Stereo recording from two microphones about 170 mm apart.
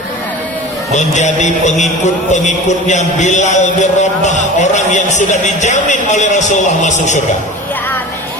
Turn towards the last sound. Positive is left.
turn(degrees=45)  # may be behind; listen again after turning